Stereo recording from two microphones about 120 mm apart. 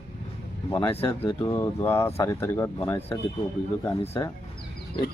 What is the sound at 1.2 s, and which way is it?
Speech, 40° left (ahead or behind).